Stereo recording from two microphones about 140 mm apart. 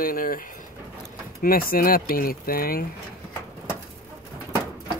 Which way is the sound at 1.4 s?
90° left.